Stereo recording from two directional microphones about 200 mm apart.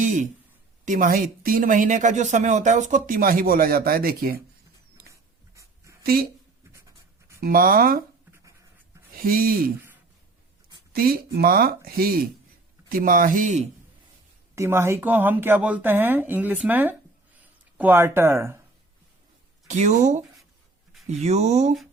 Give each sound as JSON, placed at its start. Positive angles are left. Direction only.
{"t": 0.0, "sound": "speech", "side_deg": -40}
{"t": 5.5, "sound": "dog", "side_deg": -15}
{"t": 6.0, "sound": "a woman's voice", "side_deg": -50}
{"t": 7.3, "sound": "speech", "side_deg": -45}
{"t": 9.1, "sound": "speech", "side_deg": -45}
{"t": 10.9, "sound": "speech", "side_deg": -50}
{"t": 14.5, "sound": "speech", "side_deg": -15}
{"t": 19.6, "sound": "speech", "side_deg": -35}